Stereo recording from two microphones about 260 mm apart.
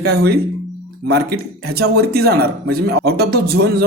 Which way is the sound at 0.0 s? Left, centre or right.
Right.